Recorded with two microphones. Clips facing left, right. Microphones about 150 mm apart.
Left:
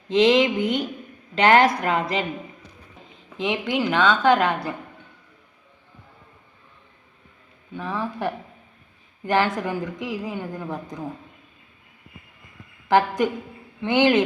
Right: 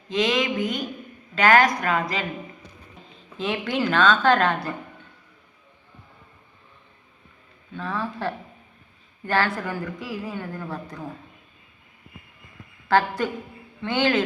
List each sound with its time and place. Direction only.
0.3 s a woman's voice: 30° left (ahead or behind)
3.3 s a woman's voice: 15° left (ahead or behind)
7.7 s a woman's voice: 15° left (ahead or behind)
12.9 s a woman's voice: 15° left (ahead or behind)